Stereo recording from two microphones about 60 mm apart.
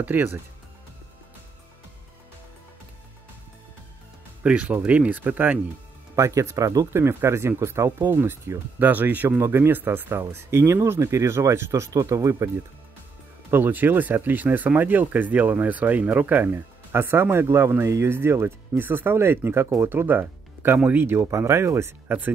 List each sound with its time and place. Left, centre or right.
0.0 s speech: right
4.4 s speech: right
6.1 s speech: right
6.9 s speech: right
8.7 s speech: right
9.4 s speech: right
11.9 s speech: right
13.5 s speech: right
17.8 s speech: right
18.1 s speech: right
21.3 s speech: right
22.0 s speech: right